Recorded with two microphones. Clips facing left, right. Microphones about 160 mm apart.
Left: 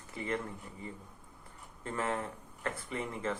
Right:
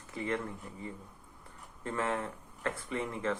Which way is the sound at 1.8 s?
20° left (ahead or behind).